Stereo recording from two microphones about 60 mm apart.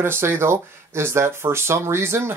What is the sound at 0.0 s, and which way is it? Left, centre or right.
Speech, right.